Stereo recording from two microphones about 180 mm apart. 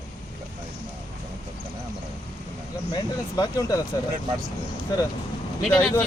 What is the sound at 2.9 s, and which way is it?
Speech, 20° left (ahead or behind).